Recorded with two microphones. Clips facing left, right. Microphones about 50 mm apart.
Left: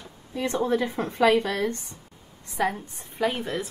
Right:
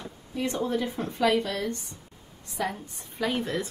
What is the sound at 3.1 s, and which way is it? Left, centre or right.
Speech, centre.